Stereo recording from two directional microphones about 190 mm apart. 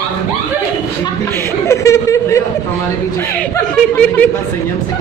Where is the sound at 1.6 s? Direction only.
15° left (ahead or behind).